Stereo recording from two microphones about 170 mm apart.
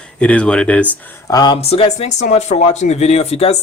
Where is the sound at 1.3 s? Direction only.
20° left (ahead or behind).